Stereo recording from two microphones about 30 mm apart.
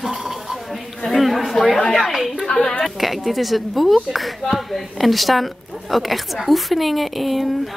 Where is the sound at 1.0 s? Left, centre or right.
Centre.